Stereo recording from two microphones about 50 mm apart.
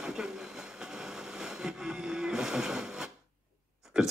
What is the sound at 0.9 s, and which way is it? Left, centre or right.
Vehicle, centre.